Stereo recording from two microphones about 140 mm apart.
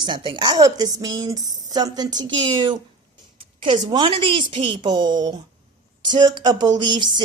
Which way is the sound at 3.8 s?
30° right (ahead or behind).